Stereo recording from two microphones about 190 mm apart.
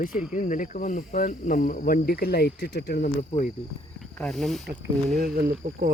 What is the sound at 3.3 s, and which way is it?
Cricket, 35° left (ahead or behind).